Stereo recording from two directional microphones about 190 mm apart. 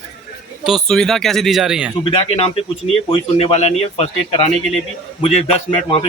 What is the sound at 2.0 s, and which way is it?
Speech, 30° left (ahead or behind).